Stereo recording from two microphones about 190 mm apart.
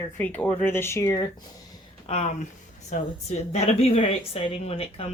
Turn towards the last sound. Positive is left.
turn(degrees=30)  # may be behind; listen again after turning